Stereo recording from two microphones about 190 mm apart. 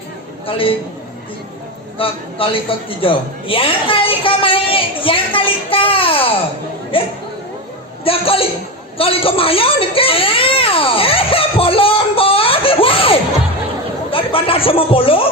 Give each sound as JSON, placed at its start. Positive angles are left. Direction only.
{"t": 0.4, "sound": "a man's voice", "side_deg": 30}
{"t": 2.0, "sound": "a man's voice", "side_deg": 30}
{"t": 9.0, "sound": "baby cry", "side_deg": 30}
{"t": 14.1, "sound": "music", "side_deg": 30}